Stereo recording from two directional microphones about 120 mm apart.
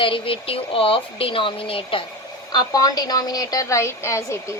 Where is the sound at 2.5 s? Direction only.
35° left (ahead or behind).